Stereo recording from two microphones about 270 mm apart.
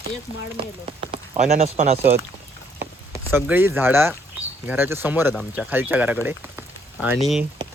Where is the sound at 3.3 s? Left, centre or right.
Centre.